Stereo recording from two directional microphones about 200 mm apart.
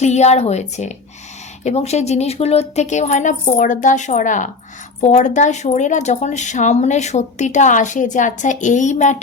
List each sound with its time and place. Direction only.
0.0 s speech: 35° left (ahead or behind)